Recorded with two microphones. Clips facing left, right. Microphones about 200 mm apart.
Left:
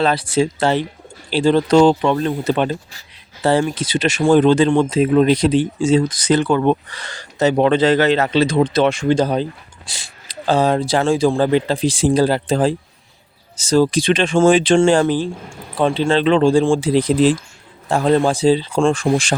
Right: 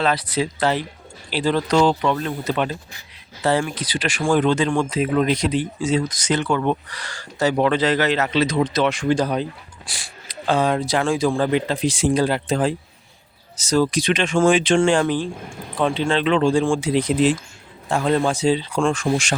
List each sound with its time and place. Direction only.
0.0 s speech: 30° left (ahead or behind)